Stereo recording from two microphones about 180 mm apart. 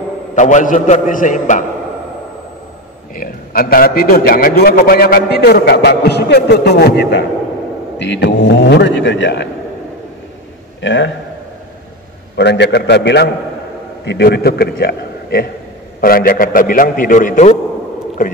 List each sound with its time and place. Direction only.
0.4 s a man's voice: 45° left (ahead or behind)
3.2 s a man's voice: 55° left (ahead or behind); by 9.5 s 75° left (ahead or behind)
10.8 s a man's voice: 90° left
12.4 s a man's voice: 70° left (ahead or behind); by 17.6 s 45° left (ahead or behind)